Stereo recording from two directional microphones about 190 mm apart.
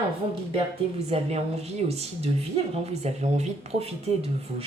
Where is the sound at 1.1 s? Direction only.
35° right (ahead or behind).